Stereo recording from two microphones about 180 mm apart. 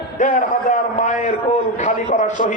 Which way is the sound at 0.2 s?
45° left (ahead or behind).